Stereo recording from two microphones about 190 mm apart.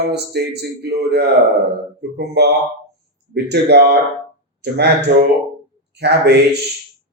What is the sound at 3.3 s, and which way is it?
Speech, 60° right (ahead or behind).